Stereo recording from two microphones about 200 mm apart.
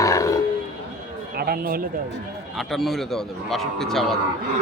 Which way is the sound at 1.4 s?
50° right (ahead or behind).